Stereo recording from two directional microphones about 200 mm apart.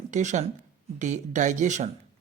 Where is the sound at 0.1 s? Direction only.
35° right (ahead or behind).